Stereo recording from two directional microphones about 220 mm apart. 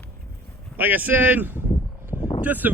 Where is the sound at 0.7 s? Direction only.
10° right (ahead or behind).